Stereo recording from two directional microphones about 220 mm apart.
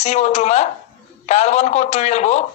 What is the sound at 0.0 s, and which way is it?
Speech, 30° left (ahead or behind).